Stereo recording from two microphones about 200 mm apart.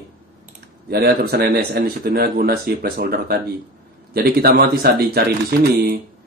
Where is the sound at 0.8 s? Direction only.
50° right (ahead or behind).